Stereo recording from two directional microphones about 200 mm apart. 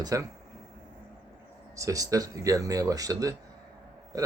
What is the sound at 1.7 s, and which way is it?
Speech, 15° right (ahead or behind).